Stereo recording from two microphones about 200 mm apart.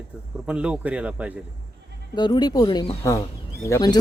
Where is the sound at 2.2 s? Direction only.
20° left (ahead or behind).